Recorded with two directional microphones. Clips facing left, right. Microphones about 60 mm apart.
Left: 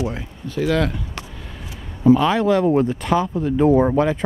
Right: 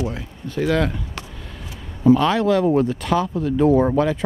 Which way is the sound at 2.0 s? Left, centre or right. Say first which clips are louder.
Left 1 dB; centre.